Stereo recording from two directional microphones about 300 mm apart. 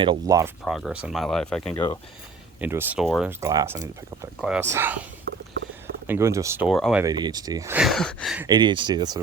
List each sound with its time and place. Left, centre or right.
0.0 s speech: centre
0.6 s speech: centre
5.3 s a sound: right
6.1 s speech: centre
7.0 s speech: centre
8.4 s speech: centre